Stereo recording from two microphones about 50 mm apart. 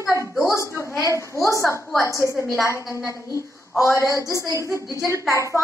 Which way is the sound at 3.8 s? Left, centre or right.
Left.